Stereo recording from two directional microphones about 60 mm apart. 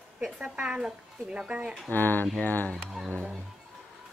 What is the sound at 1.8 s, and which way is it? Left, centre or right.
Mantra, left.